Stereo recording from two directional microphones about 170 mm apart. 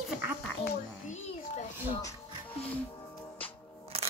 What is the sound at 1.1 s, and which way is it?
Speech, 45° left (ahead or behind).